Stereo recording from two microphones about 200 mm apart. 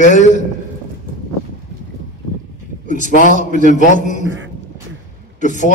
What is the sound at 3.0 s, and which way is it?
A man's voice, 40° left (ahead or behind).